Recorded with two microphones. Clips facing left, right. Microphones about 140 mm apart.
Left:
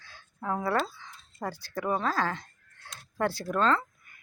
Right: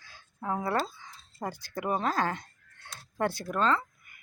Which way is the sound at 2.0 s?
20° right (ahead or behind).